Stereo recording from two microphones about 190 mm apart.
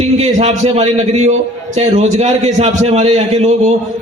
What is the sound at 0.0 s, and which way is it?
A man's voice, 35° right (ahead or behind).